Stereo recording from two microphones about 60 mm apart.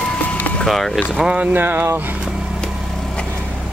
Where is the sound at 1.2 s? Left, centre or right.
Right.